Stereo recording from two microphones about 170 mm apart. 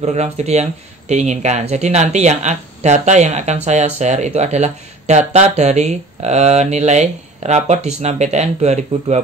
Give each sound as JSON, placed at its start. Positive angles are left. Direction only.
{"t": 0.0, "sound": "speech", "side_deg": -40}